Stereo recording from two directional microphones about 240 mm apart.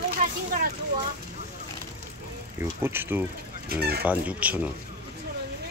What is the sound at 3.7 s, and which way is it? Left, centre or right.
Speech, right.